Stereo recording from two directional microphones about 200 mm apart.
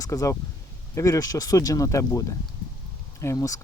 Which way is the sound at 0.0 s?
15° left (ahead or behind).